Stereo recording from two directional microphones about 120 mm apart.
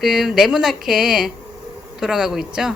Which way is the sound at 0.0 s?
5° right (ahead or behind).